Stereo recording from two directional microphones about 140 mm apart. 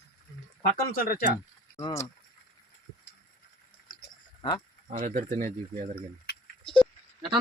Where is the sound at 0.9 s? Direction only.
90° left.